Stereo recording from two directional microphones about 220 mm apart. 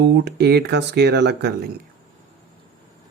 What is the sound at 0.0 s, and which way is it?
Speech, 50° right (ahead or behind).